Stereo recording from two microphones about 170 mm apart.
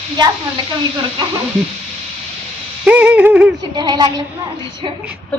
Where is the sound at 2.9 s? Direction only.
10° right (ahead or behind).